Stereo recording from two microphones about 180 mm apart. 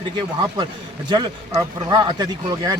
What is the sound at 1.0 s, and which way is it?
Speech, 25° right (ahead or behind).